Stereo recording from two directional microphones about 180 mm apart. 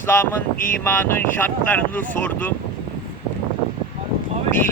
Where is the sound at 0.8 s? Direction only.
10° left (ahead or behind).